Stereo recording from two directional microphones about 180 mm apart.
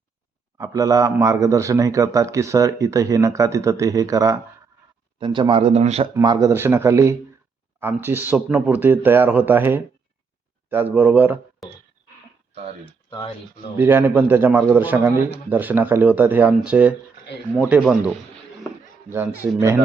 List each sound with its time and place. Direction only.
0.6 s speech: 20° right (ahead or behind); by 6.1 s 35° right (ahead or behind)
6.1 s speech: 20° right (ahead or behind)
13.7 s speech: 10° right (ahead or behind)